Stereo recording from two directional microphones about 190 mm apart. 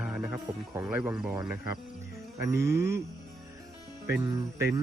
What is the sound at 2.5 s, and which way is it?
Jingle bell, 15° right (ahead or behind).